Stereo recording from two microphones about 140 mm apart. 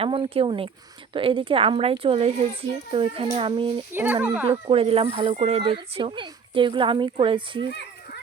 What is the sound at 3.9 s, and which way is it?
Speech, 15° right (ahead or behind).